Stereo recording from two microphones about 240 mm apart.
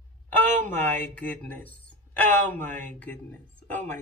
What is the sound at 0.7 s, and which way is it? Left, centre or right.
Speech, centre.